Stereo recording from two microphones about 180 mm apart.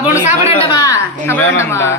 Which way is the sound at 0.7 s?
20° left (ahead or behind).